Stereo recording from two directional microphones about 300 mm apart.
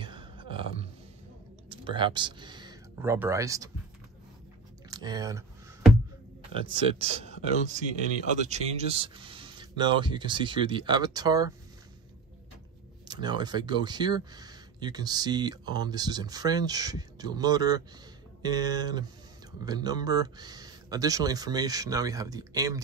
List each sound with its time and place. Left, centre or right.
0.0 s a sound: centre
1.7 s speech: centre
4.9 s speech: centre
6.5 s speech: centre
13.1 s speech: centre